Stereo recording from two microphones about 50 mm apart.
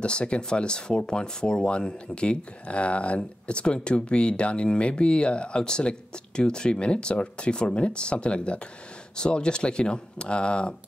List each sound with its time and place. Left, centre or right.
0.0 s speech: left